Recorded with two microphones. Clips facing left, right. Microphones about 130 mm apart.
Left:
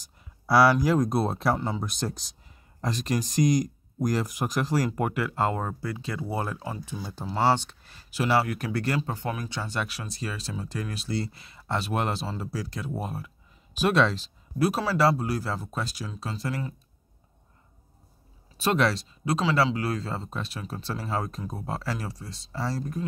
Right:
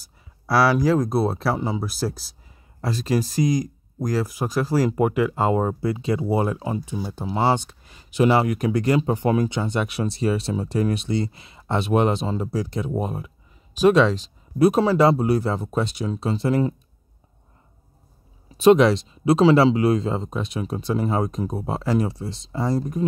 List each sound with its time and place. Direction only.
0.0 s speech: centre (ahead or behind); by 13.3 s 20° right (ahead or behind)
14.8 s speech: 20° right (ahead or behind)
18.6 s speech: 20° right (ahead or behind)